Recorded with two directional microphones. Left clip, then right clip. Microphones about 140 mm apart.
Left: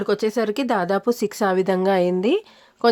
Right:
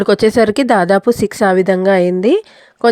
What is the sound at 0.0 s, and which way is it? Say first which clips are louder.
A woman's voice: right 10 dB; 50° right (ahead or behind).